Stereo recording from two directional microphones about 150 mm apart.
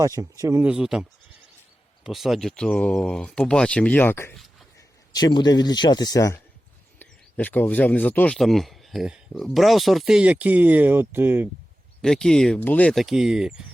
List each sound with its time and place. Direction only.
0.0 s speech: 20° right (ahead or behind)
0.6 s speech: 5° right (ahead or behind)
2.0 s speech: centre (ahead or behind)
5.1 s speech: 30° left (ahead or behind); by 11.4 s 15° right (ahead or behind)
12.0 s speech: 5° left (ahead or behind)